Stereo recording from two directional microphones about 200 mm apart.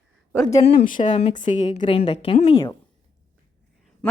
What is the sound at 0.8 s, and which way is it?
Speech, 40° left (ahead or behind).